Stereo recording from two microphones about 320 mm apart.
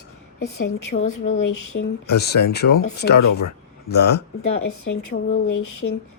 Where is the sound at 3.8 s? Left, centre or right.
Left.